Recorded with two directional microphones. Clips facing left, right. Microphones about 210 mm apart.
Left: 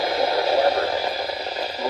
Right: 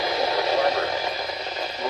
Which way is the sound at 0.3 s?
30° left (ahead or behind).